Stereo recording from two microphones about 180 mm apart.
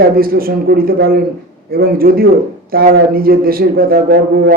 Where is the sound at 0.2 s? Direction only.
55° right (ahead or behind).